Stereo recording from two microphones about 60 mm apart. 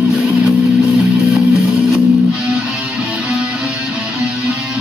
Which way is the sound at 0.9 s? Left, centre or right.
Centre.